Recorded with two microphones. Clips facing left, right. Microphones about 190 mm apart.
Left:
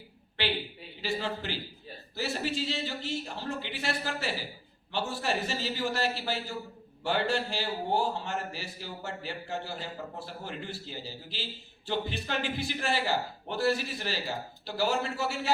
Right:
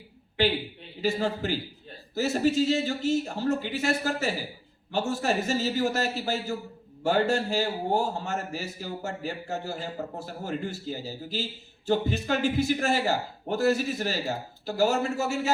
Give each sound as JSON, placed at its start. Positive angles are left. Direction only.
{"t": 0.4, "sound": "a man's voice", "side_deg": -45}